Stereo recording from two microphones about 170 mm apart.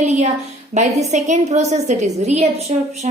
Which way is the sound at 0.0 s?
40° right (ahead or behind).